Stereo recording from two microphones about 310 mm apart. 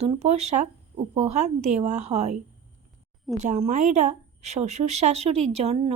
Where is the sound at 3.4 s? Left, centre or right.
Right.